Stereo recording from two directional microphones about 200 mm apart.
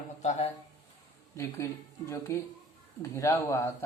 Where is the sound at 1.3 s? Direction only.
15° left (ahead or behind).